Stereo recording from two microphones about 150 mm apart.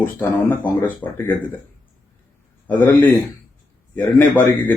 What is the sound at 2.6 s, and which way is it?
Speech, 10° left (ahead or behind).